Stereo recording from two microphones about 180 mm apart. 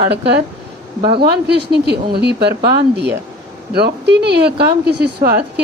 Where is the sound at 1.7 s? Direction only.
65° right (ahead or behind).